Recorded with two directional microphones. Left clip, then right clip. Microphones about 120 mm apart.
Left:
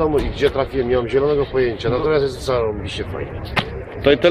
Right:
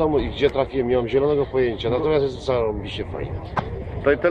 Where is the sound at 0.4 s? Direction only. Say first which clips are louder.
Left 2 dB; 20° right (ahead or behind).